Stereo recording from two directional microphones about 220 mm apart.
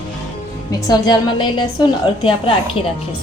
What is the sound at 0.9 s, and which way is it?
A woman's voice, 20° left (ahead or behind).